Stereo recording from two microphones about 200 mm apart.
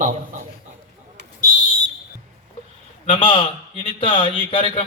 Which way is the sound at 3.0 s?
25° left (ahead or behind).